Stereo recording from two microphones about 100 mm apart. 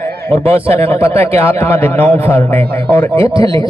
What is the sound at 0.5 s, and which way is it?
Speech, 75° right (ahead or behind).